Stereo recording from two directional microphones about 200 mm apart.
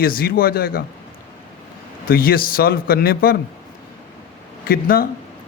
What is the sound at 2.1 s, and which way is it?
Speech, 50° left (ahead or behind).